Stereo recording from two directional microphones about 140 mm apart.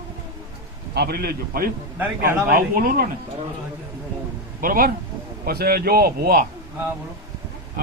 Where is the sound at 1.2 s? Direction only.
90° right.